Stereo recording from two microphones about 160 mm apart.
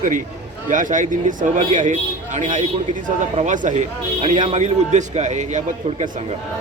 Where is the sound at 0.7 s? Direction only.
55° right (ahead or behind).